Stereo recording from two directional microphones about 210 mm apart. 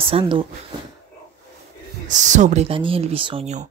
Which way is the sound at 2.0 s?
35° right (ahead or behind).